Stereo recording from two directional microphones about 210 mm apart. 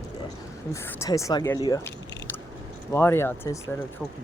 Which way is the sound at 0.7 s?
15° left (ahead or behind).